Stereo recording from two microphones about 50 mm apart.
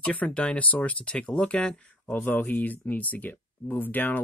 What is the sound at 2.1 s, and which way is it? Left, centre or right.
Speech, left.